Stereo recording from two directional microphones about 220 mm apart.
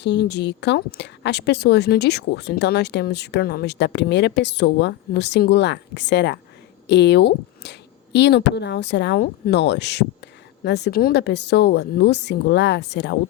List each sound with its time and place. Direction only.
0.0 s speech: 50° left (ahead or behind)